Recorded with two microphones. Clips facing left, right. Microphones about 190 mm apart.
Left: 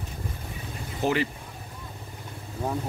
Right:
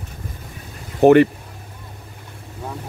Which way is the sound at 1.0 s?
60° right (ahead or behind).